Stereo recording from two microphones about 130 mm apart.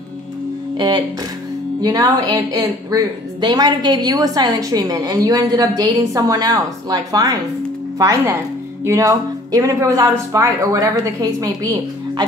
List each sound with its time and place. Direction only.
0.7 s music: 35° right (ahead or behind)
1.8 s a woman's voice: 30° right (ahead or behind)